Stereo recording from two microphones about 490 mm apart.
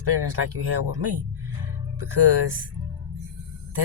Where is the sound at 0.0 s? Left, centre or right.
Right.